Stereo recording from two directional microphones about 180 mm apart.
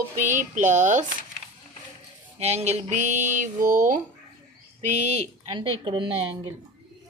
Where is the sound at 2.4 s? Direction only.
35° right (ahead or behind).